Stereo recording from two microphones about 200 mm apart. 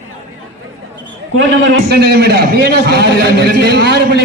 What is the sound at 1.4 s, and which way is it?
A man's voice, 60° right (ahead or behind).